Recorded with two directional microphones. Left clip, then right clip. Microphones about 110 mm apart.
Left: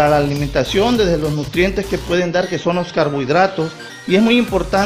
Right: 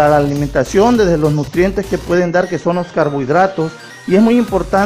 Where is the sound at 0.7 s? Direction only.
65° right (ahead or behind).